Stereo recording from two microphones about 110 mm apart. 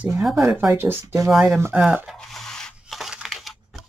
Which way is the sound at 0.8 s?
20° right (ahead or behind).